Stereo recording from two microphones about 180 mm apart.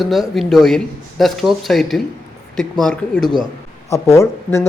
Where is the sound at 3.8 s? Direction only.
15° left (ahead or behind).